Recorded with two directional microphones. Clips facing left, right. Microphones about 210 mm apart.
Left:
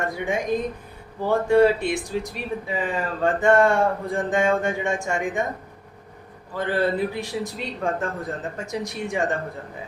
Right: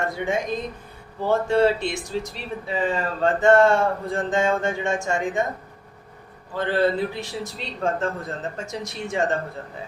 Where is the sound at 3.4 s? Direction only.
15° left (ahead or behind).